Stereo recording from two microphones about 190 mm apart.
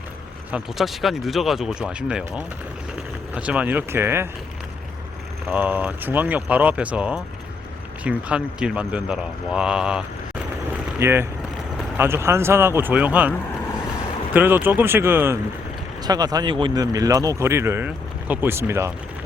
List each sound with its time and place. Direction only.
0.5 s a man's voice: centre (ahead or behind)
5.5 s a man's voice: 10° right (ahead or behind)
11.0 s speech: 10° right (ahead or behind)
14.3 s speech: 10° right (ahead or behind)